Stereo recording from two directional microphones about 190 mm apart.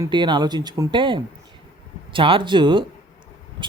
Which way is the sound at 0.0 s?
25° right (ahead or behind).